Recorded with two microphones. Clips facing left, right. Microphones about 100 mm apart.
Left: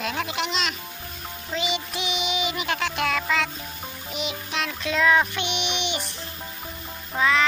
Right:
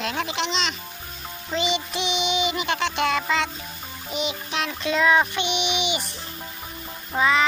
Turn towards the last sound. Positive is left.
turn(degrees=-5)  # may be behind; listen again after turning